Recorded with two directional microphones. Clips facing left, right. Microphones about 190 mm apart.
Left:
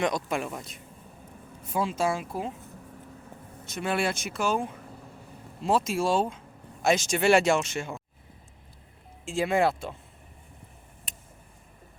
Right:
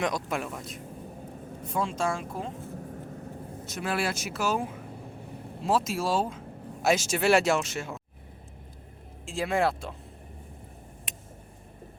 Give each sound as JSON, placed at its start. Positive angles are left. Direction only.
{"t": 0.0, "sound": "speech", "side_deg": 0}
{"t": 2.7, "sound": "vehicle", "side_deg": -45}
{"t": 3.7, "sound": "speech", "side_deg": 0}
{"t": 9.2, "sound": "speech", "side_deg": 0}